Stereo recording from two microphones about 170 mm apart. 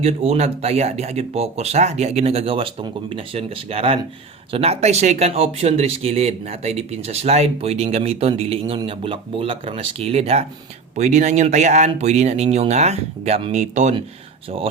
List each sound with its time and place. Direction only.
0.0 s speech: 40° right (ahead or behind)